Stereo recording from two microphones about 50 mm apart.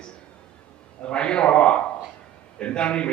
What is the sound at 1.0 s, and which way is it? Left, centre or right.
A man's voice, centre.